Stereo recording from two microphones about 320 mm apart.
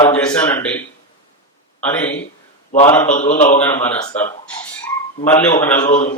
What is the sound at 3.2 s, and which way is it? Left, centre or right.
Speech, left.